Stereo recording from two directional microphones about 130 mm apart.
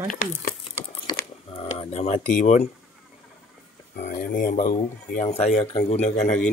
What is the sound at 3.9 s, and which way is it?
Speech, 80° left.